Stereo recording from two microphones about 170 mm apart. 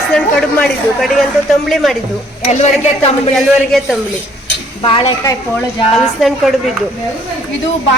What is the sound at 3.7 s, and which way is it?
Speech, 5° left (ahead or behind).